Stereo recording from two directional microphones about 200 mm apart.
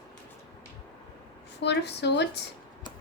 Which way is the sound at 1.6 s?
55° left (ahead or behind).